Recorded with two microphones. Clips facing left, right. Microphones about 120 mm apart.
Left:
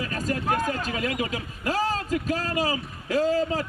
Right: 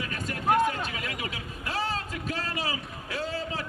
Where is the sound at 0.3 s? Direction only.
35° left (ahead or behind).